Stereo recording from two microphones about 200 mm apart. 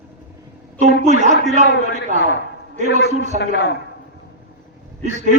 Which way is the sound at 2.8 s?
35° right (ahead or behind).